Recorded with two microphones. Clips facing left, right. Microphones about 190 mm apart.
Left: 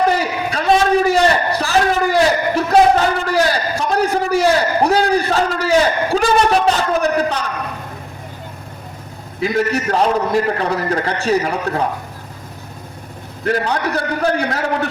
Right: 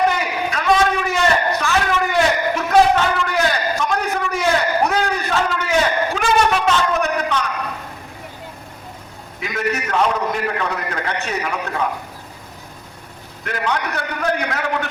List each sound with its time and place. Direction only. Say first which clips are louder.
0.1 s a sound: left 3 dB; 30° left (ahead or behind)
9.4 s a man's voice: left 6 dB; 35° left (ahead or behind)
13.4 s a man's voice: left 5 dB; 35° left (ahead or behind)